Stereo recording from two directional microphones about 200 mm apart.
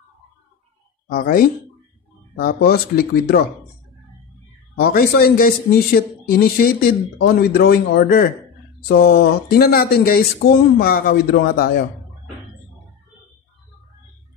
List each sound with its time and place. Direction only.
1.0 s speech: 45° left (ahead or behind)
4.7 s speech: 50° left (ahead or behind)